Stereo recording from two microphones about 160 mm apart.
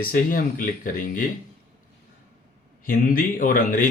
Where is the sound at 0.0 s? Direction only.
60° left (ahead or behind).